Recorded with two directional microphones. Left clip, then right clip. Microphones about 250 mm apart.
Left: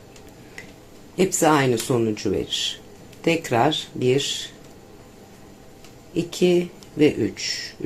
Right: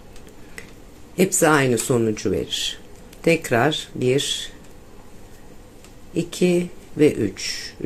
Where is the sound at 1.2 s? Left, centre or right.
Centre.